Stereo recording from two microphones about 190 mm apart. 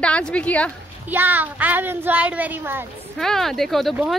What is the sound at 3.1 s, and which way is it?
Speech, centre (ahead or behind).